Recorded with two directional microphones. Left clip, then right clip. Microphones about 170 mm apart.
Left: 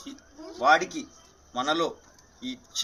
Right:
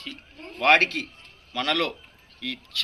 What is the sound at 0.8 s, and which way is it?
Speech, 20° right (ahead or behind).